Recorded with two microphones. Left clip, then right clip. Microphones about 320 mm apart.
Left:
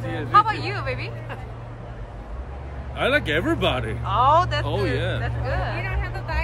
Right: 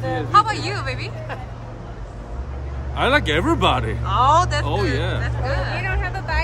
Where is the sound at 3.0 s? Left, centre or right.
Centre.